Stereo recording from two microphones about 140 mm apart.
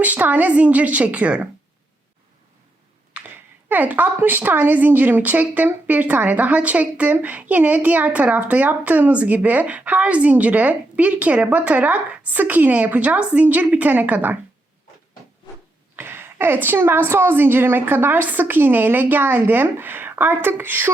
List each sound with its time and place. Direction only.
0.0 s speech: 10° right (ahead or behind)
3.7 s speech: 10° right (ahead or behind)
16.0 s speech: 15° right (ahead or behind)